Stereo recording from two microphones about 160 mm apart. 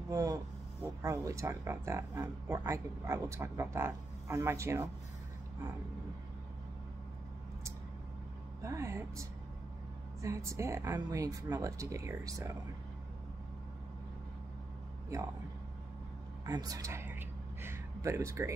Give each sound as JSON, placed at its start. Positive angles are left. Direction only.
{"t": 0.1, "sound": "speech", "side_deg": -20}
{"t": 8.6, "sound": "speech", "side_deg": -20}
{"t": 16.4, "sound": "a sound", "side_deg": -25}